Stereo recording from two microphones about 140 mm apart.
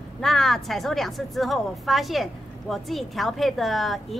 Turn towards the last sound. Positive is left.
turn(degrees=0)  # may be behind; listen again after turning